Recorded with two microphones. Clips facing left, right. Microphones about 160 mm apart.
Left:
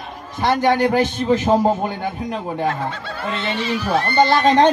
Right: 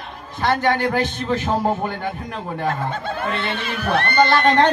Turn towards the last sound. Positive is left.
turn(degrees=15)  # may be behind; listen again after turning